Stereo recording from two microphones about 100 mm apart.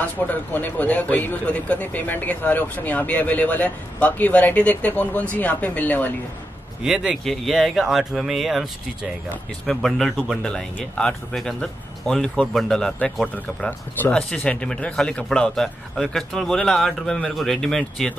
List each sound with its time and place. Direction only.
0.3 s a man's voice: 15° left (ahead or behind)
6.8 s speech: 5° right (ahead or behind)
10.4 s a man's voice: 10° left (ahead or behind)
13.3 s a man's voice: 15° left (ahead or behind)